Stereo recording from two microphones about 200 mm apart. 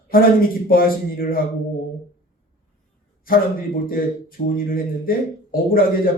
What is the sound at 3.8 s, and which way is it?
A man's voice, 45° left (ahead or behind).